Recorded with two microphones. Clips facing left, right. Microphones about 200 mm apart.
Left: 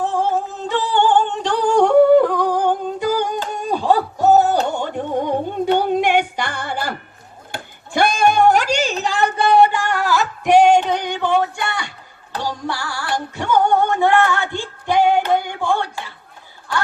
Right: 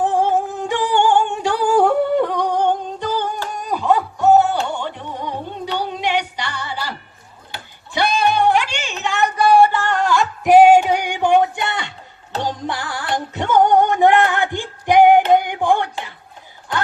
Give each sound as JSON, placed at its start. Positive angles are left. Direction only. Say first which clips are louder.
{"t": 0.0, "sound": "singing", "louder": "right 2 dB", "side_deg": -15}
{"t": 7.5, "sound": "music", "louder": "left 3 dB", "side_deg": 50}